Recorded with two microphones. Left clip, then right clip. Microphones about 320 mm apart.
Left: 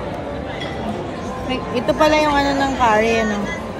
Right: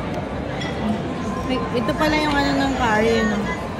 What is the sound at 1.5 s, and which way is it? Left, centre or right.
Speech, left.